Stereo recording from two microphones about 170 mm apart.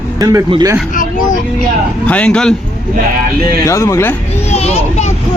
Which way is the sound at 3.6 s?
15° left (ahead or behind).